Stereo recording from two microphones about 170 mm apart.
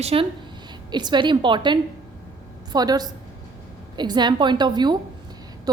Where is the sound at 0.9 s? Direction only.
25° right (ahead or behind).